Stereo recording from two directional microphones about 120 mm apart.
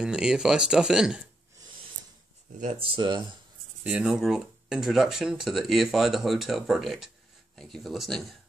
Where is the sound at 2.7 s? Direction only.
45° right (ahead or behind).